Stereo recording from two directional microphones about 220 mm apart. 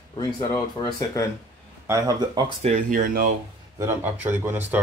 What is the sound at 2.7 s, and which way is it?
Speech, 40° right (ahead or behind).